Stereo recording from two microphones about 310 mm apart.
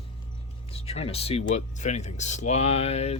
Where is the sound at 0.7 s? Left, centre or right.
Centre.